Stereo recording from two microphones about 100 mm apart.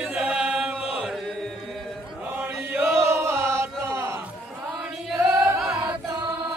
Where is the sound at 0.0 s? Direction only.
15° right (ahead or behind).